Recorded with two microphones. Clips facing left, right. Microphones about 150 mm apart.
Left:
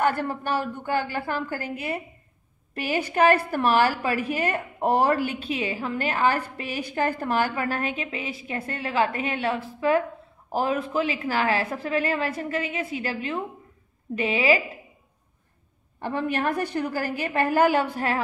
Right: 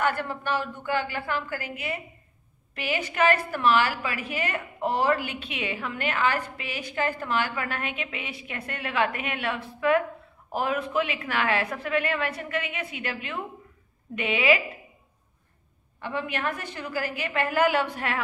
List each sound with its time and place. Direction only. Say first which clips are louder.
0.0 s a woman's voice: left 3 dB; 40° left (ahead or behind)
16.0 s a woman's voice: left 4 dB; 45° left (ahead or behind)